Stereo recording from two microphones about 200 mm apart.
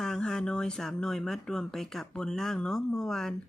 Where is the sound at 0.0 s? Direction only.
5° left (ahead or behind).